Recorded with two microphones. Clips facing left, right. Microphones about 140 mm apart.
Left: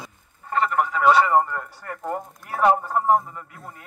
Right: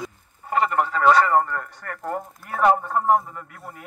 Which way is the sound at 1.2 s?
10° left (ahead or behind).